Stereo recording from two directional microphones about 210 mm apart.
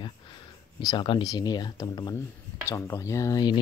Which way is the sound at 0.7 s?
20° left (ahead or behind).